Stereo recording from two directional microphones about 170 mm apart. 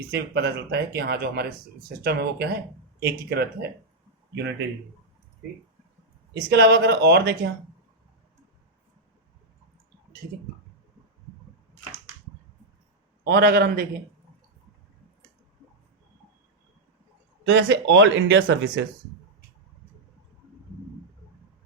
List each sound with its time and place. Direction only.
0.1 s speech: 85° right
6.3 s speech: 75° right (ahead or behind)
13.2 s a man's voice: 65° right (ahead or behind)
17.4 s speech: 90° right